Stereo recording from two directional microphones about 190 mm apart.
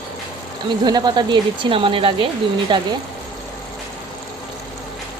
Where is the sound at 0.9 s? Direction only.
25° right (ahead or behind).